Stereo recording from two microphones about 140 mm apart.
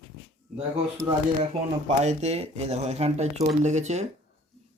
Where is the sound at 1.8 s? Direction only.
55° right (ahead or behind).